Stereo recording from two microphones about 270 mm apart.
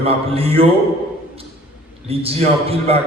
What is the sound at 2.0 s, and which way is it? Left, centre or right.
Speech, right.